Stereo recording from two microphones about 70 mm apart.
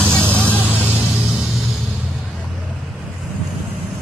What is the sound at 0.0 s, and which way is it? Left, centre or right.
Vehicle, right.